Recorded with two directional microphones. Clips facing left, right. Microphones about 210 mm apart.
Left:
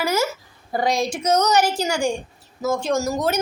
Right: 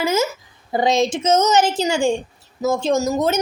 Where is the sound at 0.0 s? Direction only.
20° right (ahead or behind).